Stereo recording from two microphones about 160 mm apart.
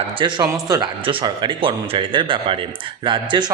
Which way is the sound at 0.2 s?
25° right (ahead or behind).